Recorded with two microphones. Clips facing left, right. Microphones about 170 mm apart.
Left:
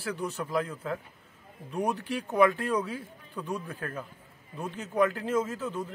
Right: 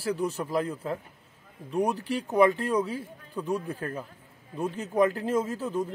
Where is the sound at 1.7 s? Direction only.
Centre (ahead or behind).